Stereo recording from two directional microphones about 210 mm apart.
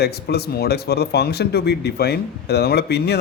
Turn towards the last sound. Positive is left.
turn(degrees=50)  # may be behind; listen again after turning